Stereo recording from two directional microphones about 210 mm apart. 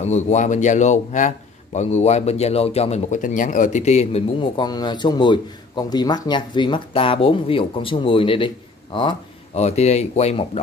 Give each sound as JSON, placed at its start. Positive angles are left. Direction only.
{"t": 0.0, "sound": "a man's voice", "side_deg": 35}
{"t": 9.6, "sound": "a man's voice", "side_deg": 30}